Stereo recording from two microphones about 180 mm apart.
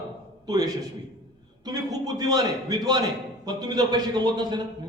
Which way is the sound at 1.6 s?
20° right (ahead or behind).